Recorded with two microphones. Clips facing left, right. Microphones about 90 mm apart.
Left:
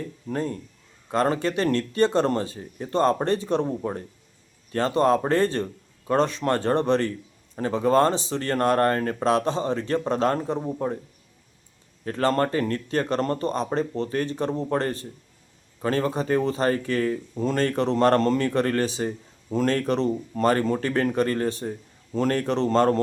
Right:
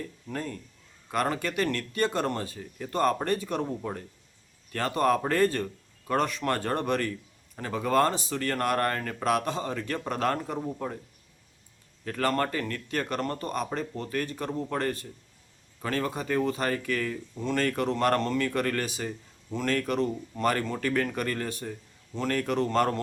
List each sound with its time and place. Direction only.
0.3 s speech: 30° left (ahead or behind)
12.0 s speech: 30° left (ahead or behind)